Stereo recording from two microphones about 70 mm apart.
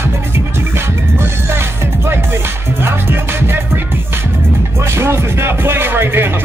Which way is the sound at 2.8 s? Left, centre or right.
Right.